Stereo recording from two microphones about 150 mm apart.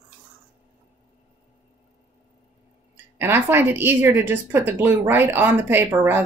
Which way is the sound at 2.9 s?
15° right (ahead or behind).